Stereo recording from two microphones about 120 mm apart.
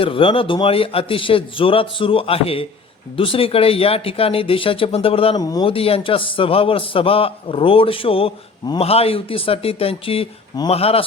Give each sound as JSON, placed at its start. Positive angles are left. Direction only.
{"t": 0.0, "sound": "a man's voice", "side_deg": 45}
{"t": 5.4, "sound": "speech", "side_deg": 30}
{"t": 5.6, "sound": "a man's voice", "side_deg": 50}
{"t": 8.8, "sound": "a man's voice", "side_deg": 55}